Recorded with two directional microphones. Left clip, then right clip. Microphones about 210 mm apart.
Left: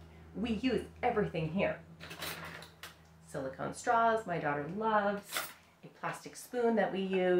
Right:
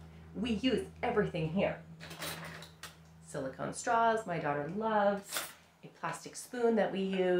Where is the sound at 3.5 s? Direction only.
15° right (ahead or behind).